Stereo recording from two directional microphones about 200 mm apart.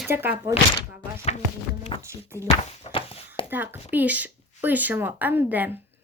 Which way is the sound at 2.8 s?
30° left (ahead or behind).